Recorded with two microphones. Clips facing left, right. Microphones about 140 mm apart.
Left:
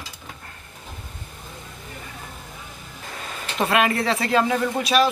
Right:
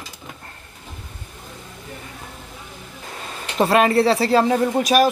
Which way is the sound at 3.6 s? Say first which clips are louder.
Right 5 dB; 30° right (ahead or behind).